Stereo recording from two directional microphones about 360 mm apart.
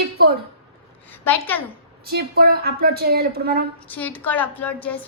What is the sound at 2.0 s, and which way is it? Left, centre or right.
A woman's voice, right.